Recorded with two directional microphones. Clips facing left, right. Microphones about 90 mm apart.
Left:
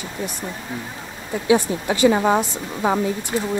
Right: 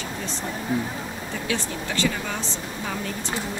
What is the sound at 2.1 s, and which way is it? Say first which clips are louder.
Speech: left 13 dB; 45° left (ahead or behind).